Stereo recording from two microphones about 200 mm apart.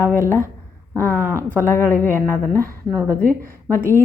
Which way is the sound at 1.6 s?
10° left (ahead or behind).